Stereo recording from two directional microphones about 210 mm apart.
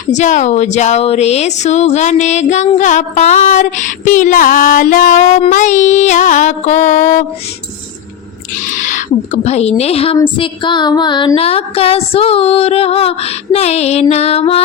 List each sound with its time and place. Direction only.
0.1 s speech: 35° left (ahead or behind)
8.7 s speech: 35° left (ahead or behind)
10.2 s music: 25° left (ahead or behind)